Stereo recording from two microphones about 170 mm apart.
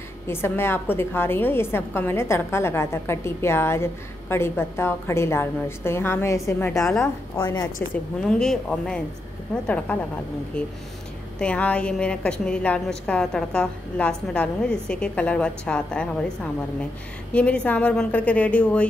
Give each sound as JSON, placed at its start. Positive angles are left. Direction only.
{"t": 0.3, "sound": "a woman's voice", "side_deg": 15}
{"t": 7.9, "sound": "a woman's voice", "side_deg": 5}
{"t": 11.3, "sound": "a woman's voice", "side_deg": 5}